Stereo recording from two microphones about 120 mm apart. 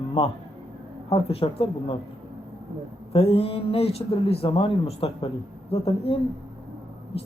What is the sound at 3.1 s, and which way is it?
A man's voice, 55° left (ahead or behind).